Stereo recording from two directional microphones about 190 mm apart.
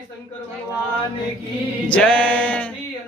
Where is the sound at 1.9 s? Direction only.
5° left (ahead or behind).